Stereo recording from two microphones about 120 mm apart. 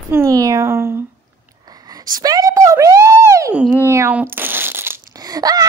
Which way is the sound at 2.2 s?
30° right (ahead or behind).